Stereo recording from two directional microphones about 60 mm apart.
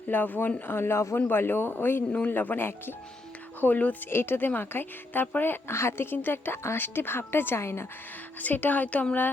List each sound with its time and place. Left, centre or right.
0.1 s a woman's voice: left
4.1 s speech: left
8.4 s a woman's voice: left